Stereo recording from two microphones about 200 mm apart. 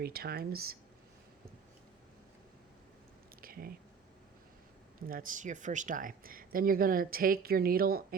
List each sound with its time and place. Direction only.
0.0 s speech: 50° right (ahead or behind)
3.4 s a sound: 45° right (ahead or behind)
4.9 s speech: 45° right (ahead or behind)